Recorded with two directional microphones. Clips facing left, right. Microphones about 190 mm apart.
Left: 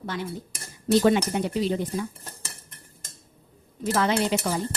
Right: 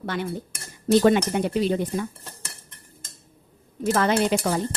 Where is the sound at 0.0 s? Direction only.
65° right (ahead or behind).